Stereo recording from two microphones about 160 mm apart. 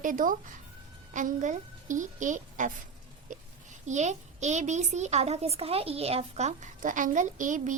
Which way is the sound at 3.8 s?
45° right (ahead or behind).